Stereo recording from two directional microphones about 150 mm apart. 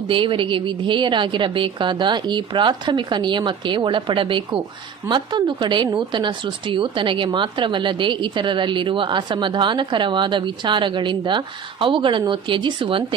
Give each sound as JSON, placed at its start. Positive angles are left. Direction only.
{"t": 0.1, "sound": "a woman's voice", "side_deg": -35}